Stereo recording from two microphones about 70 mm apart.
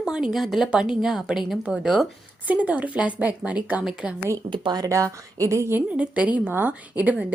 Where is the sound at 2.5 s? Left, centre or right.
Right.